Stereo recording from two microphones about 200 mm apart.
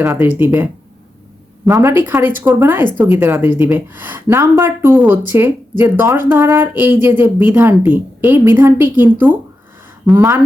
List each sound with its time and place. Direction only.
0.0 s speech: 10° right (ahead or behind)
1.7 s speech: 15° right (ahead or behind)